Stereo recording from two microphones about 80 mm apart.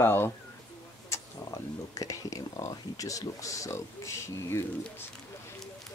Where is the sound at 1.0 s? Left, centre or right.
Left.